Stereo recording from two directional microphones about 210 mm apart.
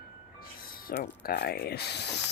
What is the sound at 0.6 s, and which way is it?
Speech, 45° left (ahead or behind).